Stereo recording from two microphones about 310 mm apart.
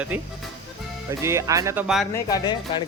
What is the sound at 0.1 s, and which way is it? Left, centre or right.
Speech, centre.